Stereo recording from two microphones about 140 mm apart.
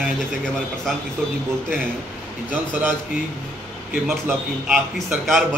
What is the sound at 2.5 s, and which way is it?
Speech, 10° right (ahead or behind).